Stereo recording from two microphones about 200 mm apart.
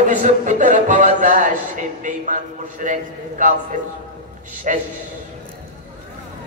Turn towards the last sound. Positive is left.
turn(degrees=-40)  # may be behind; listen again after turning